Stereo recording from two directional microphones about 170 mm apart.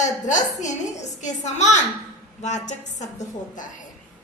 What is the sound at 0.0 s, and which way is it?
A child's voice, 45° left (ahead or behind).